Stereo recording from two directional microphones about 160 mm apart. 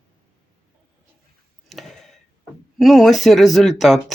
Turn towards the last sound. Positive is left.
turn(degrees=0)  # may be behind; listen again after turning